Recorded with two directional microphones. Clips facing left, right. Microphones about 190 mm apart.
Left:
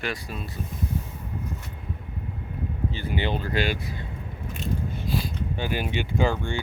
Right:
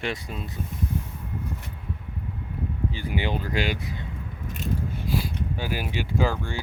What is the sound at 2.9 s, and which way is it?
Speech, 10° right (ahead or behind).